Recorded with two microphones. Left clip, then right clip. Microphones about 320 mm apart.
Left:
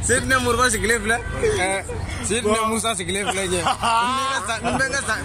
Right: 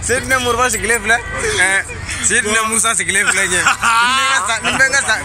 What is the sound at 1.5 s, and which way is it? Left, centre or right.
A man's voice, centre.